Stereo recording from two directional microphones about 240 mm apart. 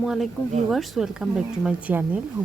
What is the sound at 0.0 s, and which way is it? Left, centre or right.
Speech, centre.